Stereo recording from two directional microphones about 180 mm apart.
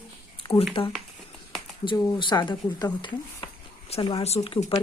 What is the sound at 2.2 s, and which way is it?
Speech, 25° left (ahead or behind).